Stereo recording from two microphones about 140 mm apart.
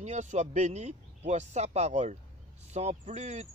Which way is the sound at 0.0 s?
55° right (ahead or behind).